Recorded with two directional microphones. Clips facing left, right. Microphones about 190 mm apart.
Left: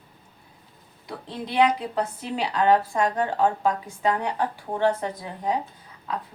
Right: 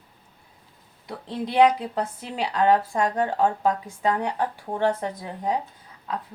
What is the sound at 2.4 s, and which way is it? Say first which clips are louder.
Speech: even; 45° right (ahead or behind).